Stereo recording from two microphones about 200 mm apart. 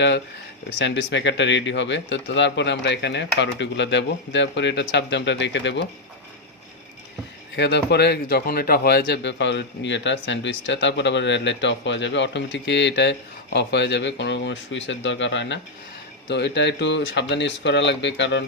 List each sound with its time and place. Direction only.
0.8 s speech: 65° left (ahead or behind)
7.5 s speech: 60° left (ahead or behind)